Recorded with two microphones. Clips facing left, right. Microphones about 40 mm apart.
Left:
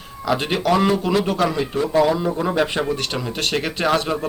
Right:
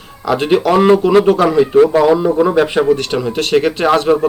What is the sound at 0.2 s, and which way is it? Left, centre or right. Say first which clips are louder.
Speech: right 8 dB; centre.